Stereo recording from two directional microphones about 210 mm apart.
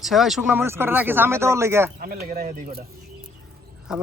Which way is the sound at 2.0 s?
45° right (ahead or behind).